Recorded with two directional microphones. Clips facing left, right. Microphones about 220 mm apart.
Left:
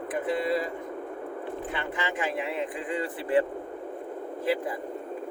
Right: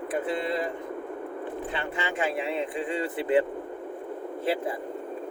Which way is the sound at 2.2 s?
30° right (ahead or behind).